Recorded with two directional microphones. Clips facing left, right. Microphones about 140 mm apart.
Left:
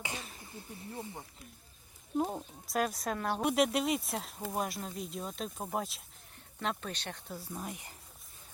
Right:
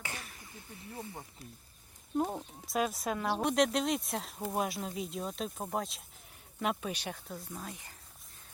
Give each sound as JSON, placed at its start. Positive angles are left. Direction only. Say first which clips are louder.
{"t": 0.0, "sound": "a sound", "louder": "left 2 dB", "side_deg": 20}
{"t": 2.1, "sound": "speech", "louder": "even", "side_deg": 0}
{"t": 6.6, "sound": "speech", "louder": "right 3 dB", "side_deg": -10}
{"t": 7.3, "sound": "speech", "louder": "left 2 dB", "side_deg": 15}